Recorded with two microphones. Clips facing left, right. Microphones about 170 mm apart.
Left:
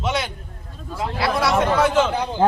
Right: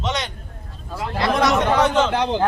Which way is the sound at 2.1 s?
75° right (ahead or behind).